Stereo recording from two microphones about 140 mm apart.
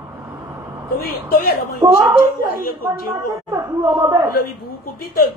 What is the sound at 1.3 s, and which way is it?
Speech, 90° left.